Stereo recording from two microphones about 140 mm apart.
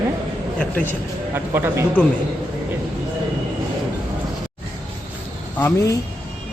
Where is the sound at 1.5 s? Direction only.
15° right (ahead or behind).